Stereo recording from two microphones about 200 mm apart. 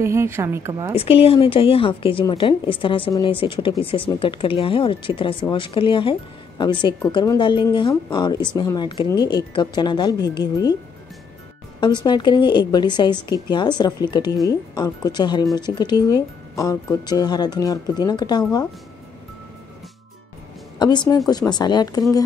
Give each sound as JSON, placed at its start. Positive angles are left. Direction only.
{"t": 0.0, "sound": "a woman's voice", "side_deg": -15}
{"t": 0.9, "sound": "a woman's voice", "side_deg": 30}
{"t": 11.8, "sound": "a woman's voice", "side_deg": 20}
{"t": 20.8, "sound": "a woman's voice", "side_deg": 20}